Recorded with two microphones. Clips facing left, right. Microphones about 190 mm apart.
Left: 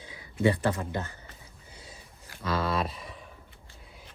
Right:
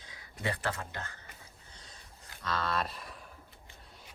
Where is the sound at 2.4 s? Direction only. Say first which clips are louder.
Left 5 dB; 5° left (ahead or behind).